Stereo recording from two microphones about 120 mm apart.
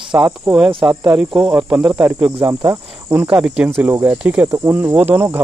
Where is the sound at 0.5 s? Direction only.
10° right (ahead or behind).